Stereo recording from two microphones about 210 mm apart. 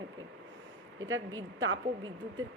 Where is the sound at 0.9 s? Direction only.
65° right (ahead or behind).